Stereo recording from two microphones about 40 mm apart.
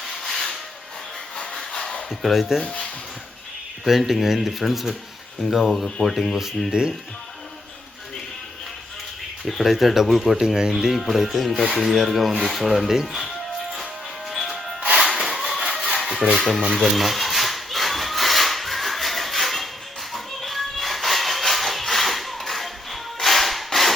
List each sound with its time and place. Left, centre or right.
0.0 s a sound: centre
2.2 s speech: centre
2.6 s speech: left
3.8 s speech: centre
6.7 s speech: right
9.4 s speech: centre
10.4 s speech: centre
10.9 s speech: centre
14.3 s music: centre
14.9 s a sound: centre
16.3 s speech: centre
16.7 s rub: centre
20.1 s a sound: centre